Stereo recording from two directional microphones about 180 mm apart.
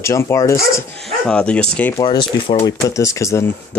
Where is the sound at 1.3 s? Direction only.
5° left (ahead or behind).